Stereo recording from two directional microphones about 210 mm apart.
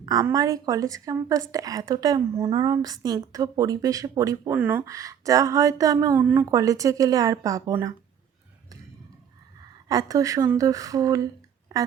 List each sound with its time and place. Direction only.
0.0 s a woman's voice: 15° right (ahead or behind)
9.9 s a woman's voice: 15° right (ahead or behind)